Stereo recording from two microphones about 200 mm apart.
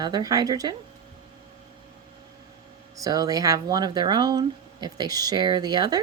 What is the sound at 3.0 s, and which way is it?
Speech, 15° right (ahead or behind).